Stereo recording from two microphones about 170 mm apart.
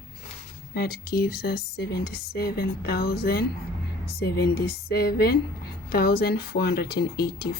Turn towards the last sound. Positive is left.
turn(degrees=70)  # may be behind; listen again after turning